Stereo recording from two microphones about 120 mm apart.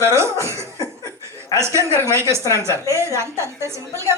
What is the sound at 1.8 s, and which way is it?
A woman's voice, 25° right (ahead or behind).